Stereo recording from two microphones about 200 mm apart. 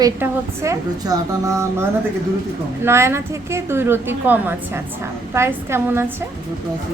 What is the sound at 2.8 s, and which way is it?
A woman's voice, 15° right (ahead or behind).